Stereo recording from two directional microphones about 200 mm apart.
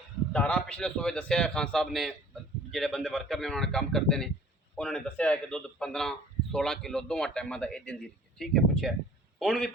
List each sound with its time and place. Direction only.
0.3 s a man's voice: 5° left (ahead or behind)